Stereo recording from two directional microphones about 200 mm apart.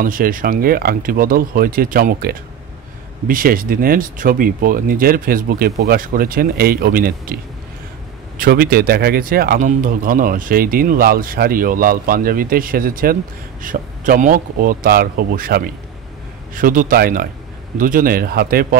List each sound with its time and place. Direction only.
0.0 s speech: 45° right (ahead or behind)
8.4 s speech: 50° right (ahead or behind)